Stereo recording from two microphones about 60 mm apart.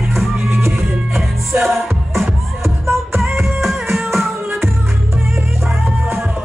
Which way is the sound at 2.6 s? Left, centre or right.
Right.